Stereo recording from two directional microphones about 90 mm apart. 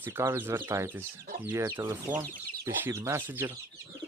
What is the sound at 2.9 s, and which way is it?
Speech, 30° right (ahead or behind).